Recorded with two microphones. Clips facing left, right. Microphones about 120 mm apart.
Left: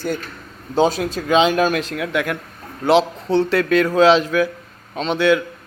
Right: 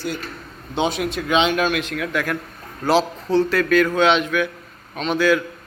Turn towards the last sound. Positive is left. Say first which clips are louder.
# left 2 dB
turn(degrees=25)  # may be behind; listen again after turning